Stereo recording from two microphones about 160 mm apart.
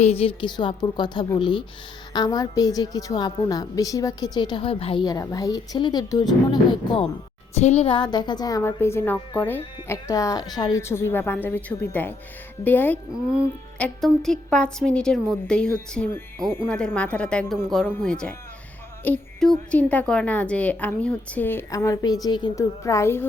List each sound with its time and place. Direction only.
0.0 s a woman's voice: 40° left (ahead or behind)
7.5 s a woman's voice: 45° left (ahead or behind); by 23.2 s 15° left (ahead or behind)